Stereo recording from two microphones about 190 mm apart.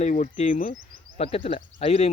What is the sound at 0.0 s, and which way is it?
Speech, 40° left (ahead or behind).